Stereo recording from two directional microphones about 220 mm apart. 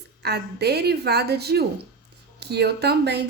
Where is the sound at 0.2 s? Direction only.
50° right (ahead or behind).